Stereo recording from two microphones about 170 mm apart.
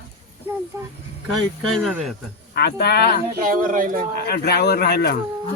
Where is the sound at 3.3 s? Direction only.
55° right (ahead or behind).